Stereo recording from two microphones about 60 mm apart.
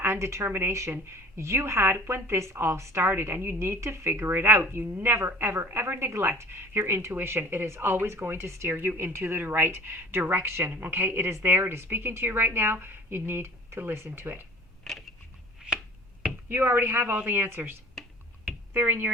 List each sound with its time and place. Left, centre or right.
0.0 s a woman's voice: right
14.9 s a sound: centre
16.5 s a woman's voice: right